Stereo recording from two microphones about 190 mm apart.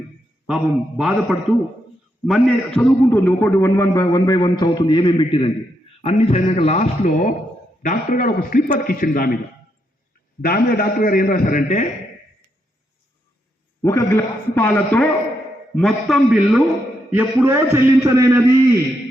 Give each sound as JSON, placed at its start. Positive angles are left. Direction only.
{"t": 0.4, "sound": "a man's voice", "side_deg": -5}
{"t": 10.4, "sound": "a man's voice", "side_deg": 50}
{"t": 13.8, "sound": "a man's voice", "side_deg": 15}